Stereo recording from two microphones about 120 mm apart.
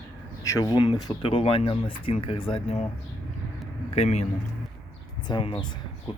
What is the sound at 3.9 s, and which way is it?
Speech, 65° left (ahead or behind).